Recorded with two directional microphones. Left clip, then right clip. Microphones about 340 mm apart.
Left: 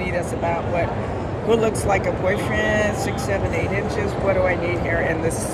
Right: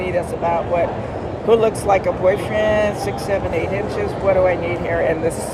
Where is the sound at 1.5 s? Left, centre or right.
Centre.